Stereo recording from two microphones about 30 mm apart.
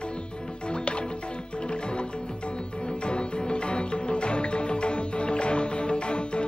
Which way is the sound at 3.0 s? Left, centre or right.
Left.